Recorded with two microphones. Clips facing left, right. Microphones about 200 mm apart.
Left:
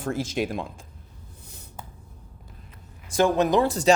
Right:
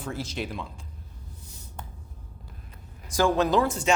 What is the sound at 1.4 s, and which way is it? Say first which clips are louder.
Writing: left 1 dB; 60° left (ahead or behind).